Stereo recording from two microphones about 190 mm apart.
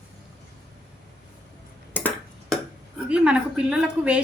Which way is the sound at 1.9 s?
10° left (ahead or behind).